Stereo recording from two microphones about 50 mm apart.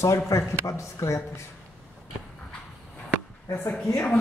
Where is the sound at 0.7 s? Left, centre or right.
Left.